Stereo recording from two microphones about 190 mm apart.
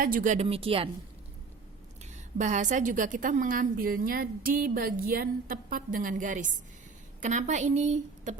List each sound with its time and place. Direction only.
0.0 s a woman's voice: 45° right (ahead or behind)
0.4 s speech: 30° right (ahead or behind)
2.4 s a woman's voice: 40° right (ahead or behind)